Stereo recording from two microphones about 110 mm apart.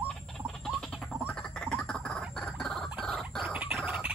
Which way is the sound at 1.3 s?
5° left (ahead or behind).